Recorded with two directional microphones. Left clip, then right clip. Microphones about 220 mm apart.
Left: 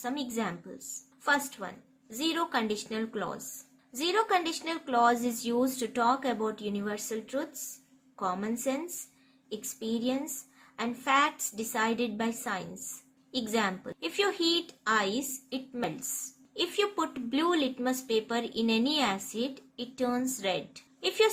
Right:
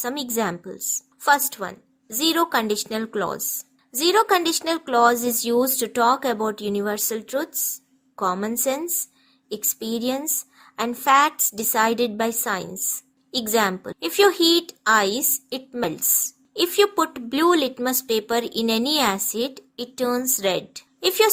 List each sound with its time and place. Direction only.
0.0 s speech: 50° right (ahead or behind)